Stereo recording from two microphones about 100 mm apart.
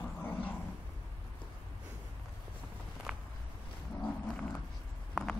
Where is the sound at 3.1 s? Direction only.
5° right (ahead or behind).